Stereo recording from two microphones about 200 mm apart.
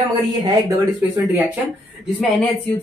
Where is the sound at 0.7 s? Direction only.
10° right (ahead or behind).